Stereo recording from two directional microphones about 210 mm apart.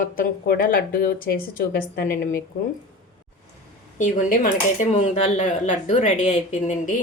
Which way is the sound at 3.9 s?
40° left (ahead or behind).